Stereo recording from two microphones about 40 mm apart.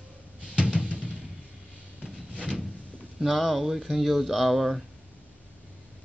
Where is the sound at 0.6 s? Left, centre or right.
Right.